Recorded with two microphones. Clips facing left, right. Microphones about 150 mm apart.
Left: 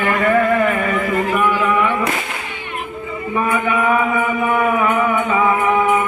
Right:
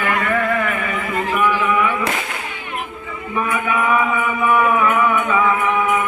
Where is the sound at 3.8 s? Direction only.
40° left (ahead or behind).